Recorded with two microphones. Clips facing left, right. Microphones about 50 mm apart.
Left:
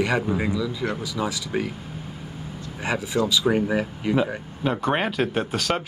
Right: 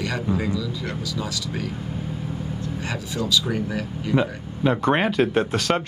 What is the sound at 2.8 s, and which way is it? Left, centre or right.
Speech, left.